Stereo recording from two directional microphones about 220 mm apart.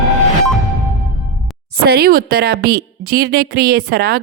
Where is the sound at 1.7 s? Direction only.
45° right (ahead or behind).